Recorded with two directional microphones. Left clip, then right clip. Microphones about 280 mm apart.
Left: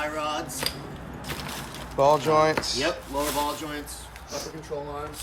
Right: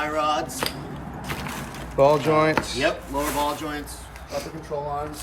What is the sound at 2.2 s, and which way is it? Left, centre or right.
Speech, centre.